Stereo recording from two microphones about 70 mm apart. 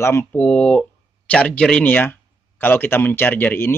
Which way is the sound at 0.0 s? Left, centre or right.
Left.